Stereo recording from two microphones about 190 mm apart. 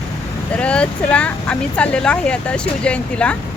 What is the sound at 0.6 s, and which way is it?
Speech, 5° left (ahead or behind).